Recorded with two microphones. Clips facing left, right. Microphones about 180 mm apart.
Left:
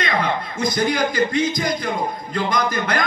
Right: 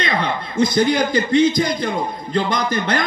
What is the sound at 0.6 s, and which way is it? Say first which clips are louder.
A man's voice: right 5 dB; 30° right (ahead or behind).